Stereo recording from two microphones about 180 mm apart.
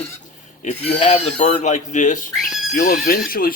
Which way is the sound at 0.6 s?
35° left (ahead or behind).